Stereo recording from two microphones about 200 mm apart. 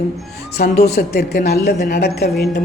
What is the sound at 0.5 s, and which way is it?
Speech, 50° left (ahead or behind).